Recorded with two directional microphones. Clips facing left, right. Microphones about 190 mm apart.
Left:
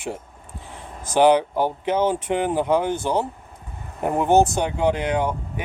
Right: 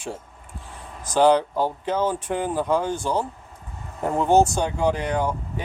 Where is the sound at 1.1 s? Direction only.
15° left (ahead or behind).